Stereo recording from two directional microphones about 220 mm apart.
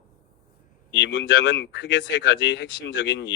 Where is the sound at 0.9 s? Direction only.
55° left (ahead or behind).